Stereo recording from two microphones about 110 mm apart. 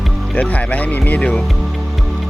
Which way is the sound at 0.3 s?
15° left (ahead or behind).